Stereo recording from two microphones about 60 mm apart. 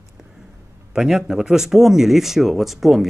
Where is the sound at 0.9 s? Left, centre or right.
Centre.